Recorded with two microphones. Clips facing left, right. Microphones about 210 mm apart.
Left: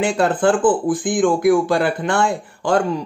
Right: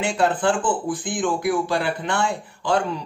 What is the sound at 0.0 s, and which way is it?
Speech, 50° left (ahead or behind).